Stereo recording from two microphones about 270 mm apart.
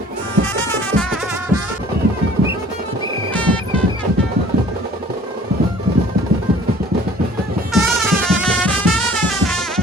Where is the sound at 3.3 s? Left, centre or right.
Centre.